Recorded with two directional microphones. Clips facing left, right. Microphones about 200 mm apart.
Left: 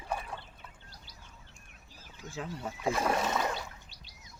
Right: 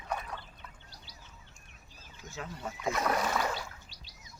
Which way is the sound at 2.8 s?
30° left (ahead or behind).